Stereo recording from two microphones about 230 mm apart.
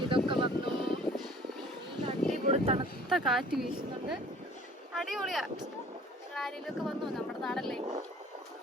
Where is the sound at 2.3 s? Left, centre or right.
Right.